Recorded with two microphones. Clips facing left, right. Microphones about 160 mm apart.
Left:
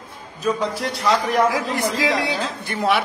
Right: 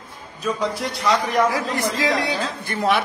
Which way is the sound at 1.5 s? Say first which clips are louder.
Left 1 dB; 15° left (ahead or behind).